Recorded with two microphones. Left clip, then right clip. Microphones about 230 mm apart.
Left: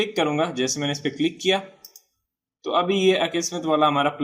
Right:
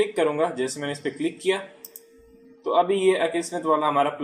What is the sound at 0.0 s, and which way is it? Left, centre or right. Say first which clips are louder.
Speech: even; left.